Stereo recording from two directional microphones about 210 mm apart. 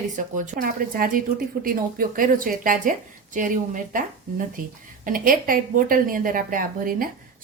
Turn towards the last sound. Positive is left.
turn(degrees=-40)  # may be behind; listen again after turning